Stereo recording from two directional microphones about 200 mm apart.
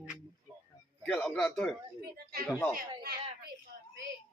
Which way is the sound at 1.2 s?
Centre (ahead or behind).